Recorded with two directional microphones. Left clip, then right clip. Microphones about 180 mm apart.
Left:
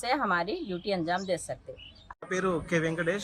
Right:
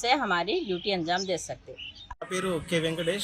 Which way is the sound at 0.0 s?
30° left (ahead or behind).